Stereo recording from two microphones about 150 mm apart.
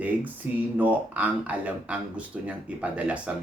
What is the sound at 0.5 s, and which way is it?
Speech, 10° right (ahead or behind).